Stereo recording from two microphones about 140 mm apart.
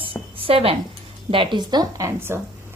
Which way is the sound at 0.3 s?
40° right (ahead or behind).